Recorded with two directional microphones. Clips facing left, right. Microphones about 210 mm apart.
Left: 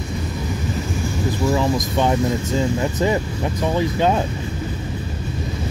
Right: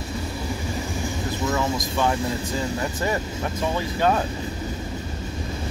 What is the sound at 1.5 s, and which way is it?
Speech, 15° left (ahead or behind).